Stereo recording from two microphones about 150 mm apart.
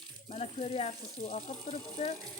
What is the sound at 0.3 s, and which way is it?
Speech, 40° left (ahead or behind).